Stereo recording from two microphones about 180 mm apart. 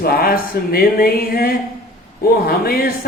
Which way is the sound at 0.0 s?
55° left (ahead or behind).